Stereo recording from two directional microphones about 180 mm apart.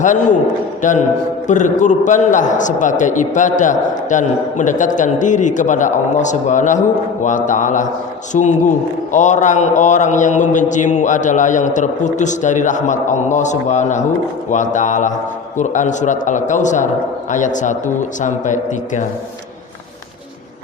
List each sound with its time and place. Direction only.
0.0 s a man's voice: 45° left (ahead or behind)